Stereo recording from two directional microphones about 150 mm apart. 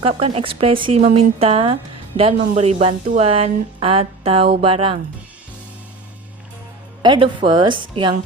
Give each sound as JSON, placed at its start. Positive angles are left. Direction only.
{"t": 0.0, "sound": "speech", "side_deg": -40}
{"t": 7.0, "sound": "speech", "side_deg": -30}